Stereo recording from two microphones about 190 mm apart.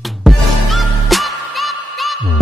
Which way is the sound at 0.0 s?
Centre (ahead or behind).